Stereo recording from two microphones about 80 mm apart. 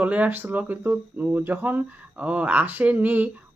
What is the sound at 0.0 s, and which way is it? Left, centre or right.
Speech, centre.